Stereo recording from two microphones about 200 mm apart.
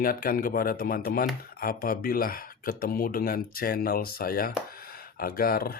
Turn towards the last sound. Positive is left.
turn(degrees=50)  # may be behind; listen again after turning